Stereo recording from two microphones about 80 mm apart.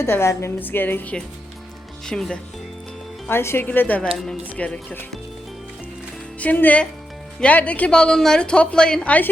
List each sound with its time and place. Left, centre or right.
0.0 s a woman's voice: left
2.0 s speech: centre
3.2 s speech: left
6.4 s speech: centre